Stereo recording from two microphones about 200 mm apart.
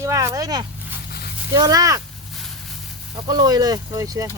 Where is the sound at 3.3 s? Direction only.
20° right (ahead or behind).